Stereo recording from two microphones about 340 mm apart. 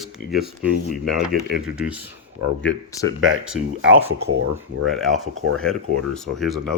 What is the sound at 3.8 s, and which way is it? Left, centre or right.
Speech, right.